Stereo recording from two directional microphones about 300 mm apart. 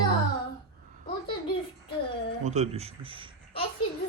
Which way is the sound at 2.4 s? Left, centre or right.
Right.